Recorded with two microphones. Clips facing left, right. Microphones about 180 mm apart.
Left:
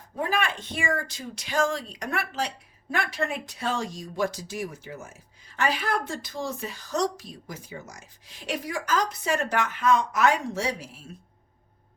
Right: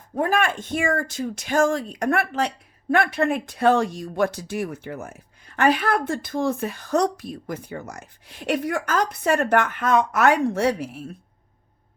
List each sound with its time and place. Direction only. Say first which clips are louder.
0.2 s speech: right 6 dB; 50° right (ahead or behind)